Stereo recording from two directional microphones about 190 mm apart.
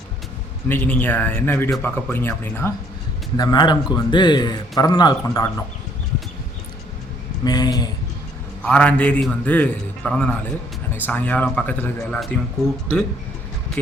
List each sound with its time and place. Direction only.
0.7 s a man's voice: 10° left (ahead or behind)
3.3 s speech: 20° left (ahead or behind)
7.4 s speech: 20° left (ahead or behind)
8.6 s a man's voice: 5° left (ahead or behind)